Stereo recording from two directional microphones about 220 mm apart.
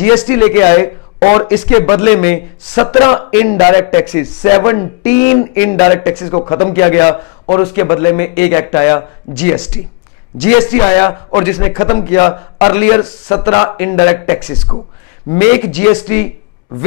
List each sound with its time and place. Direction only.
0.0 s a man's voice: 10° left (ahead or behind)
2.7 s a man's voice: 25° left (ahead or behind)